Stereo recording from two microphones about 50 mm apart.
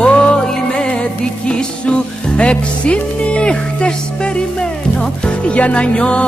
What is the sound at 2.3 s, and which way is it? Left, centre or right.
Music, left.